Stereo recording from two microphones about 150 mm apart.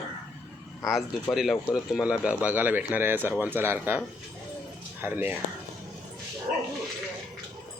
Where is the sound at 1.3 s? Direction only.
Centre (ahead or behind).